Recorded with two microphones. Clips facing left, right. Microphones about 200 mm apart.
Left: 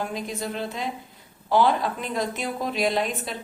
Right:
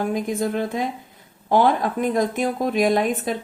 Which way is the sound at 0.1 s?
50° right (ahead or behind).